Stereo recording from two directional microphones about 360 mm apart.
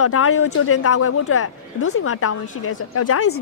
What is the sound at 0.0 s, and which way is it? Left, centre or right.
Speech, left.